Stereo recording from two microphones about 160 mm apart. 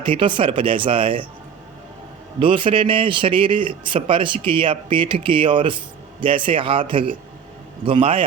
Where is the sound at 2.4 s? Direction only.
30° right (ahead or behind).